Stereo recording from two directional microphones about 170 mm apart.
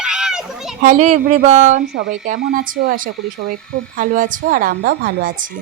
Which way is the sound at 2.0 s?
55° right (ahead or behind).